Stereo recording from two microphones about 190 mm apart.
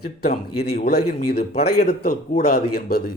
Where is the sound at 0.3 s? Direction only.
55° left (ahead or behind).